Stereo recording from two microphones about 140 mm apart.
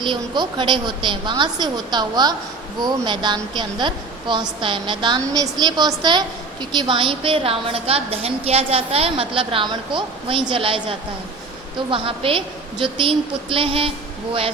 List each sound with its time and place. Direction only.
0.0 s a woman's voice: 30° right (ahead or behind)